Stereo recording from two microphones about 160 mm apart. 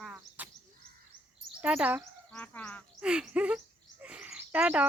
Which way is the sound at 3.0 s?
5° right (ahead or behind).